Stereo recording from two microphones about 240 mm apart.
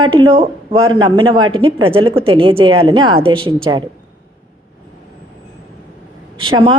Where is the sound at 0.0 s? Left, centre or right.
Centre.